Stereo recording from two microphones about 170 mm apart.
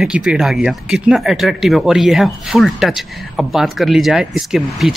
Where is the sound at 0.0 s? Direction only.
5° right (ahead or behind).